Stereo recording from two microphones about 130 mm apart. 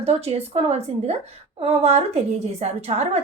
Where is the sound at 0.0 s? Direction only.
50° right (ahead or behind).